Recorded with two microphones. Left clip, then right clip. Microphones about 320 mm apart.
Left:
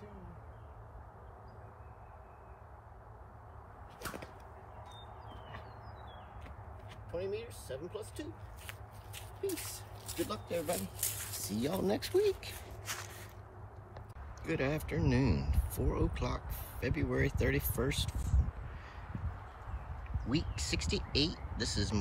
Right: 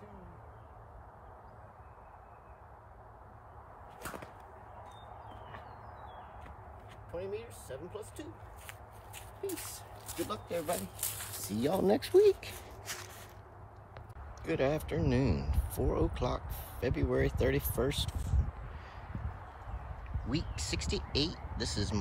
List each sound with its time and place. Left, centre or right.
4.0 s whip: centre
7.1 s speech: centre
10.0 s speech: centre
11.6 s speech: right
14.4 s speech: centre
20.2 s speech: centre